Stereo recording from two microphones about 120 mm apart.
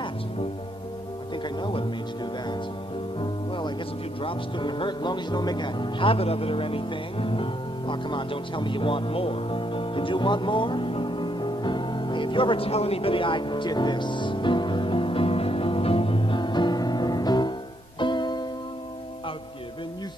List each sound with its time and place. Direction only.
1.3 s music: 40° left (ahead or behind)
3.2 s music: 45° left (ahead or behind)